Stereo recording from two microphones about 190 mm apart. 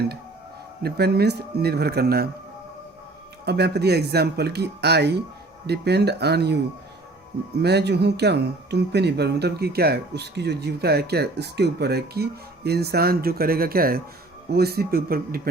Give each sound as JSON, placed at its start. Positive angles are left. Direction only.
{"t": 0.8, "sound": "speech", "side_deg": -55}
{"t": 3.4, "sound": "speech", "side_deg": -60}
{"t": 7.6, "sound": "a man's voice", "side_deg": -60}